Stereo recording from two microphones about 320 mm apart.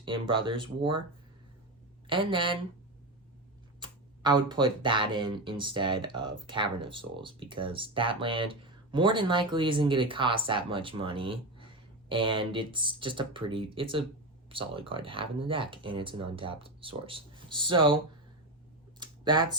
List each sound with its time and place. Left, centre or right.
0.0 s speech: centre
2.0 s speech: centre
3.8 s speech: centre
18.9 s a sound: centre